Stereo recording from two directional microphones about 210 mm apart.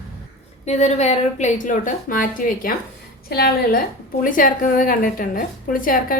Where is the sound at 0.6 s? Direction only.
30° left (ahead or behind).